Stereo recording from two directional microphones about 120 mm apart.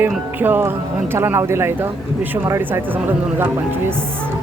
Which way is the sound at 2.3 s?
20° right (ahead or behind).